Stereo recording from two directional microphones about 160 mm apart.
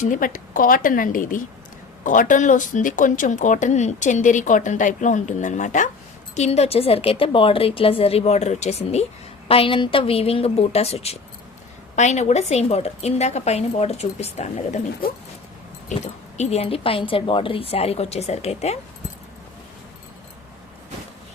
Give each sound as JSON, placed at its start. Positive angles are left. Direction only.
{"t": 0.0, "sound": "a woman's voice", "side_deg": 55}
{"t": 9.5, "sound": "a woman's voice", "side_deg": 35}
{"t": 16.4, "sound": "a woman's voice", "side_deg": 40}